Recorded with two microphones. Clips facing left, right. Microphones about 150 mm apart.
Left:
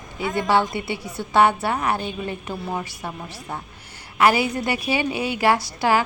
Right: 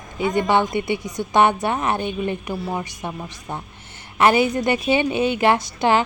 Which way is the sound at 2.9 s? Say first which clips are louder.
Right 2 dB; 15° right (ahead or behind).